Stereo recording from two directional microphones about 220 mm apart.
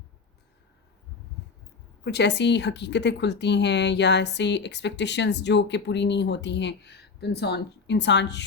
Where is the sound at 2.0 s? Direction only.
50° left (ahead or behind).